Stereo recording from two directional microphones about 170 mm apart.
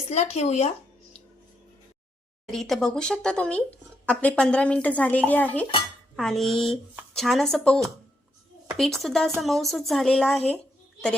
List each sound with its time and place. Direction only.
0.1 s speech: 40° left (ahead or behind)
2.5 s speech: centre (ahead or behind)